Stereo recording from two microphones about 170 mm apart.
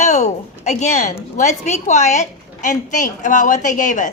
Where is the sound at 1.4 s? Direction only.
45° left (ahead or behind).